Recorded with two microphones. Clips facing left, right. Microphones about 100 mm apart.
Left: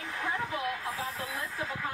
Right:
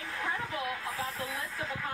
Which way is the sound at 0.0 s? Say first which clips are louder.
Left 2 dB; 15° left (ahead or behind).